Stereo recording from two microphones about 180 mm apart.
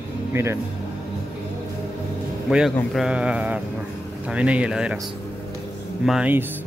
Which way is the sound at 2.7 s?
Centre (ahead or behind).